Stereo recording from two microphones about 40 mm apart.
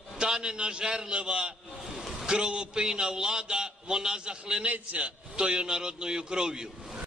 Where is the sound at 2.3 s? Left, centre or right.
Right.